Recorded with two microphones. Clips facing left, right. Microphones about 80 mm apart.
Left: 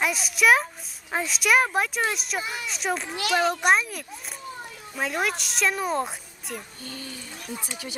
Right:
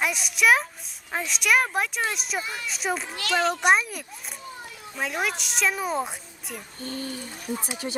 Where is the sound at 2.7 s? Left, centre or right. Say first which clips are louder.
Even; centre.